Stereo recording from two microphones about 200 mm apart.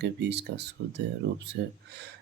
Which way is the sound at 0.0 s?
60° right (ahead or behind).